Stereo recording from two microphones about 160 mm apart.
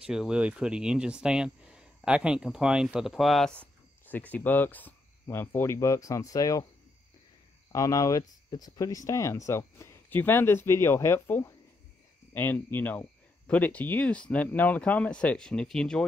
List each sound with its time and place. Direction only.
0.0 s speech: 5° right (ahead or behind); by 6.6 s 20° left (ahead or behind)
7.7 s speech: 20° left (ahead or behind); by 16.1 s 5° left (ahead or behind)